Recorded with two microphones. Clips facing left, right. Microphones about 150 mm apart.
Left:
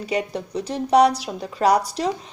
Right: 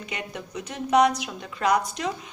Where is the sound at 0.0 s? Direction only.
35° left (ahead or behind).